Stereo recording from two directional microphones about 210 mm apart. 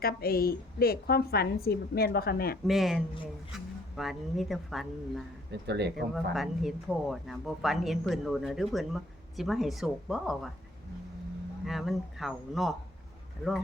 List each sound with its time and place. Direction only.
0.0 s a woman's voice: 45° left (ahead or behind)
2.6 s speech: centre (ahead or behind)
3.5 s a sound: centre (ahead or behind)
3.9 s speech: centre (ahead or behind)
5.5 s speech: 55° right (ahead or behind)
6.3 s speech: centre (ahead or behind)
11.6 s speech: centre (ahead or behind)